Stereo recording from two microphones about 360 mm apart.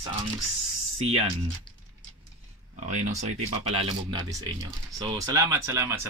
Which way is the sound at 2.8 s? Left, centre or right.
Centre.